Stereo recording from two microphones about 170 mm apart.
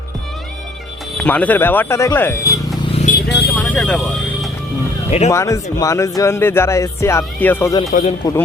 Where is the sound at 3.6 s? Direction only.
10° left (ahead or behind).